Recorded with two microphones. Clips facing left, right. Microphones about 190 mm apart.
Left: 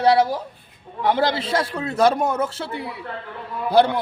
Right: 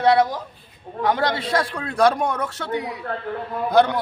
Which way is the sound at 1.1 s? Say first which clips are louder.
Left 2 dB; 25° left (ahead or behind).